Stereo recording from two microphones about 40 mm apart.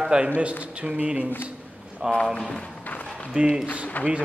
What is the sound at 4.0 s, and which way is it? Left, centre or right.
Speech, left.